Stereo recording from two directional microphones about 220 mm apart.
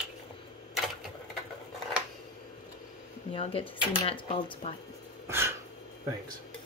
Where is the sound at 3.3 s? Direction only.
25° left (ahead or behind).